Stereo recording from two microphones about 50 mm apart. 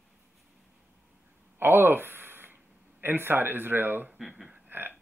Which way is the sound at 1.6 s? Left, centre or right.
Right.